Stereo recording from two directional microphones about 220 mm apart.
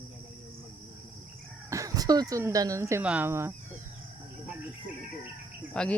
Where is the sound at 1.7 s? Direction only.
15° right (ahead or behind).